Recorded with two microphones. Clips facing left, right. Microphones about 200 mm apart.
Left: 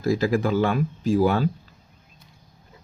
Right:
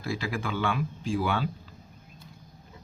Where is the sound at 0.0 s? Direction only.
40° left (ahead or behind).